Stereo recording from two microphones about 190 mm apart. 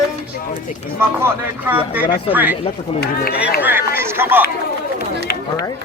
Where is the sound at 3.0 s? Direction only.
55° left (ahead or behind).